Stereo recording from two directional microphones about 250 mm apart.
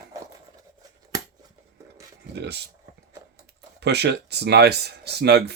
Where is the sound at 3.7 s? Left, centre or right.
Right.